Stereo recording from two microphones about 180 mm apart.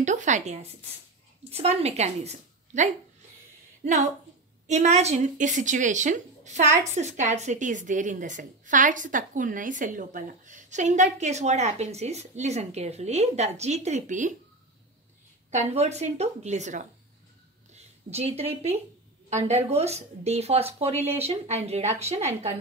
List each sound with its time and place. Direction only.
0.0 s a woman's voice: 40° right (ahead or behind)
15.5 s a woman's voice: 35° right (ahead or behind)